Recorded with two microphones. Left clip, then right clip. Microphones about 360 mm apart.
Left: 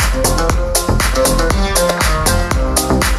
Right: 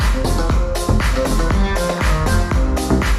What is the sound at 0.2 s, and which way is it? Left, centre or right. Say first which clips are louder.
Music: left 6 dB; left.